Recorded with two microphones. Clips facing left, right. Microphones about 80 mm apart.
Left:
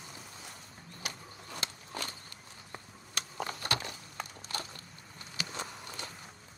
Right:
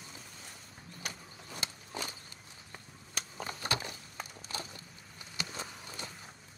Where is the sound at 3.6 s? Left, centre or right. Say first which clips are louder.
Right 1 dB; centre.